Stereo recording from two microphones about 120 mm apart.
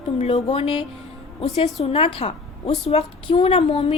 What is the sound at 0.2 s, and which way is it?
Speech, 60° left (ahead or behind).